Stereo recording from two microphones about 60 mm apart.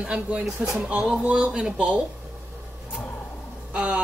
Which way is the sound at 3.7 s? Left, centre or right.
Centre.